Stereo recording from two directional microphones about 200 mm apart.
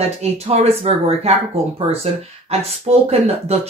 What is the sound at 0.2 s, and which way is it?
Speech, 30° right (ahead or behind).